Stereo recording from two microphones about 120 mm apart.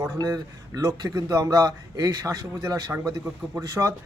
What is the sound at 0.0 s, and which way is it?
Speech, 35° right (ahead or behind).